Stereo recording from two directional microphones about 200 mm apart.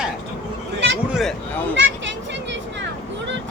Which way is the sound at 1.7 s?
65° right (ahead or behind).